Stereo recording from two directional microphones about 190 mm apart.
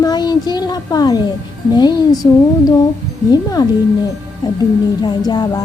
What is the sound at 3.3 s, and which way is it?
Speech, 20° left (ahead or behind).